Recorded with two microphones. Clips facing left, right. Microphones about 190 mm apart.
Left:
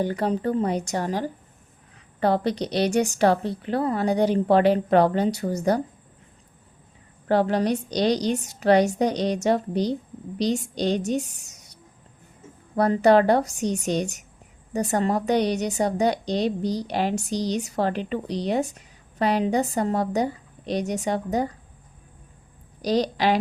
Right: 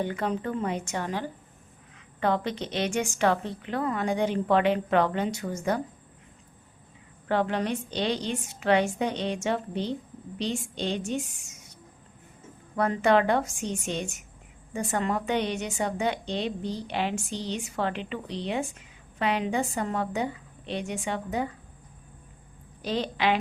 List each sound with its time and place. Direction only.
0.0 s speech: 35° left (ahead or behind)
7.3 s speech: 35° left (ahead or behind)
12.7 s speech: 35° left (ahead or behind)
22.8 s speech: 40° left (ahead or behind)